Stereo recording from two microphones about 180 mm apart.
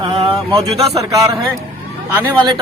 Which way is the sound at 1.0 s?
20° right (ahead or behind).